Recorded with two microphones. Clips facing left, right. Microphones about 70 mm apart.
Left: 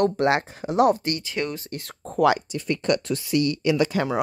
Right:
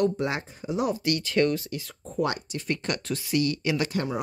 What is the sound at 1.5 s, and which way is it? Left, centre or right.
Speech, left.